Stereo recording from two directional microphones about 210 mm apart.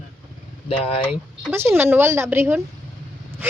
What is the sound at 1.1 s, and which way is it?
A woman's voice, 10° right (ahead or behind).